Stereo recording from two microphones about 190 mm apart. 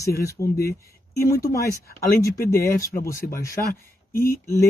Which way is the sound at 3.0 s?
15° left (ahead or behind).